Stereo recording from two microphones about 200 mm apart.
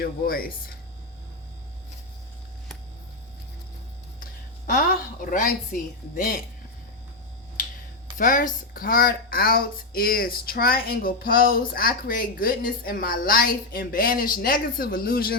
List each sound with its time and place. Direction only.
0.0 s speech: 45° left (ahead or behind)
4.2 s a sound: 45° left (ahead or behind)
6.1 s speech: 45° left (ahead or behind)
8.2 s speech: 45° left (ahead or behind)